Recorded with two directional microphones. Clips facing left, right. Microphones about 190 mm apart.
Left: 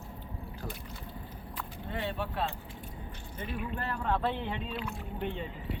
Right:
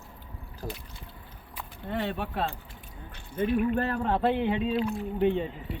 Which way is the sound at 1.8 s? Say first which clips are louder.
Right 5 dB; 65° right (ahead or behind).